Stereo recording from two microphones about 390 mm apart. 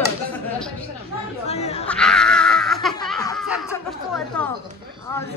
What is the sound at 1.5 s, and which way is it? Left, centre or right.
Speech, centre.